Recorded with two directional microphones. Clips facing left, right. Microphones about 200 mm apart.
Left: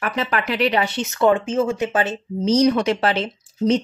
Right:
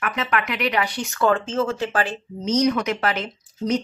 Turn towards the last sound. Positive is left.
turn(degrees=30)  # may be behind; listen again after turning